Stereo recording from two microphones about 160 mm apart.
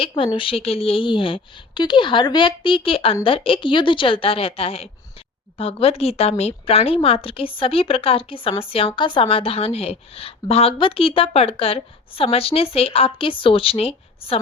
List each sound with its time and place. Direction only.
0.3 s a woman's voice: 35° left (ahead or behind)